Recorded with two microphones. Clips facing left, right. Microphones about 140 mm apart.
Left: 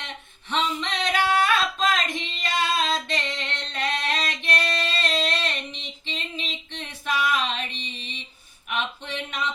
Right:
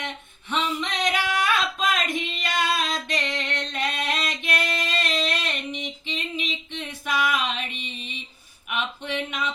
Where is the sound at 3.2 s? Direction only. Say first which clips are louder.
Right 3 dB; 10° right (ahead or behind).